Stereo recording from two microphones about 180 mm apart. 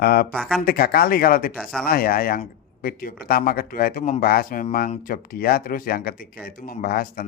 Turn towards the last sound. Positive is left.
turn(degrees=55)  # may be behind; listen again after turning